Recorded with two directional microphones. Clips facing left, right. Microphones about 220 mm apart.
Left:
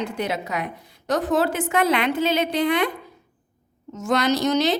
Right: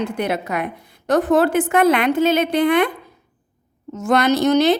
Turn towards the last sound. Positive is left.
turn(degrees=-55)  # may be behind; listen again after turning